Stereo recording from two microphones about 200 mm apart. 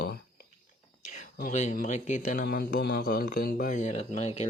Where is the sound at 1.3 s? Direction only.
40° left (ahead or behind).